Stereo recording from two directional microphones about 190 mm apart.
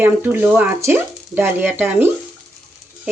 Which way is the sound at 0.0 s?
10° right (ahead or behind).